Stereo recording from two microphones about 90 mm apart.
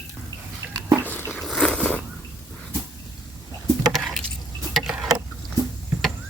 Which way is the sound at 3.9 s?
Centre (ahead or behind).